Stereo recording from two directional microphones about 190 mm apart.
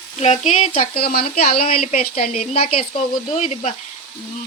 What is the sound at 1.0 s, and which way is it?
Speech, 50° left (ahead or behind).